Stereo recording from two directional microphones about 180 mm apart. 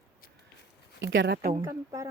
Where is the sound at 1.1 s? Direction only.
70° right (ahead or behind).